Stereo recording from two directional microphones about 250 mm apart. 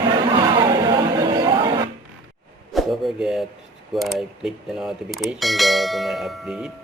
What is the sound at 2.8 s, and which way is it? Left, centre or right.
Speech, centre.